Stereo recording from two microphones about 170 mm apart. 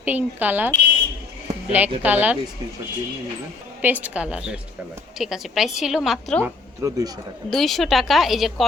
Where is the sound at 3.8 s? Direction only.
10° right (ahead or behind).